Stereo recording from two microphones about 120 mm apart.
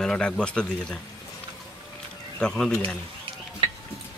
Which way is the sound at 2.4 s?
5° left (ahead or behind).